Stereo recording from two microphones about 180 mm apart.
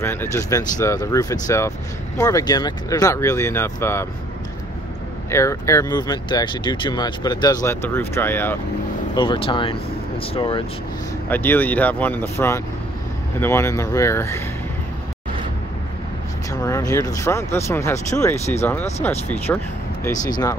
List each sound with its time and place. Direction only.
0.0 s speech: 15° left (ahead or behind)
5.3 s speech: 15° left (ahead or behind)
9.1 s speech: 25° left (ahead or behind)
11.2 s speech: 10° left (ahead or behind)
16.6 s speech: 20° left (ahead or behind)